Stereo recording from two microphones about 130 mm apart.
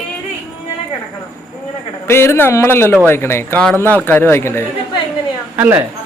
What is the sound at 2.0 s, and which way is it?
A man's voice, 20° left (ahead or behind).